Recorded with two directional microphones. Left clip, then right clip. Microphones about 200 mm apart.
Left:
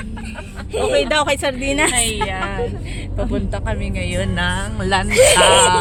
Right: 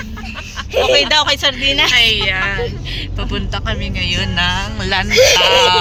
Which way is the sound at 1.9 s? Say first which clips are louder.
Right 8 dB; 5° left (ahead or behind).